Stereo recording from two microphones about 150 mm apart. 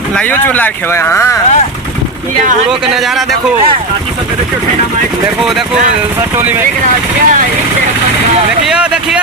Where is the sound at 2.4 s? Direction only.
60° right (ahead or behind).